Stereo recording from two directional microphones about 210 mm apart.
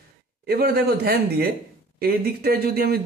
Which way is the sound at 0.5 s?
45° right (ahead or behind).